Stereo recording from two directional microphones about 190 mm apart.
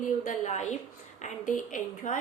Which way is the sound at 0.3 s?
40° left (ahead or behind).